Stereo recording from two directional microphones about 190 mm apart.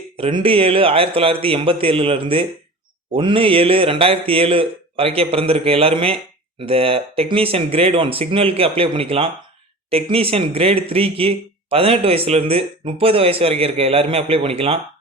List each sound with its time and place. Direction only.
0.2 s a man's voice: 30° right (ahead or behind)